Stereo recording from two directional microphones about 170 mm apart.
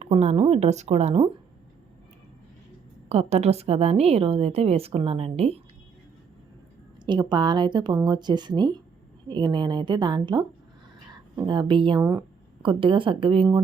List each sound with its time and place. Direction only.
0.0 s a woman's voice: 40° right (ahead or behind)
3.1 s a woman's voice: 40° right (ahead or behind)
7.0 s a woman's voice: 25° right (ahead or behind)